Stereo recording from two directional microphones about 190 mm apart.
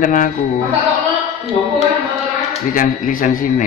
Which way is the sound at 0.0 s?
45° left (ahead or behind).